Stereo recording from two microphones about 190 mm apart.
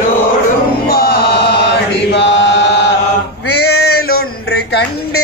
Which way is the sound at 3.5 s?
60° left (ahead or behind).